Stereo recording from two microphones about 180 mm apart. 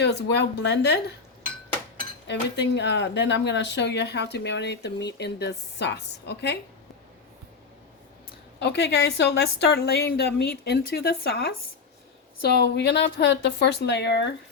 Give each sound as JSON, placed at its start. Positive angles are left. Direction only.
{"t": 0.0, "sound": "speech", "side_deg": 75}
{"t": 2.2, "sound": "speech", "side_deg": 80}
{"t": 8.5, "sound": "a woman's voice", "side_deg": 70}